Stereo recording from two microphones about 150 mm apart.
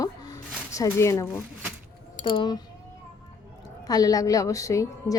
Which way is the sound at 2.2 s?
30° left (ahead or behind).